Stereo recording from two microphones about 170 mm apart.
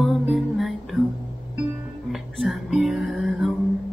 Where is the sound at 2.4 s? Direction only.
Centre (ahead or behind).